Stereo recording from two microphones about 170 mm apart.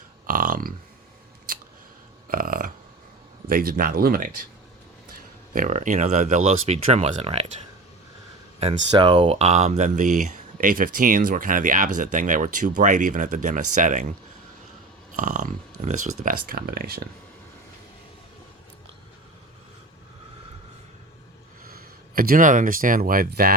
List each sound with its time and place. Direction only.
0.3 s grunt: 55° right (ahead or behind)
2.3 s a sound: 55° right (ahead or behind)
3.4 s speech: 60° right (ahead or behind)
5.5 s speech: 50° right (ahead or behind)
8.9 s speech: 30° right (ahead or behind); by 14.1 s 50° right (ahead or behind)
15.1 s speech: 50° right (ahead or behind)
21.7 s speech: 60° right (ahead or behind)